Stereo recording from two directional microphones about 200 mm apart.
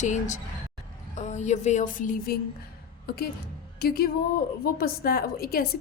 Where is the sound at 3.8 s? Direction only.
50° left (ahead or behind).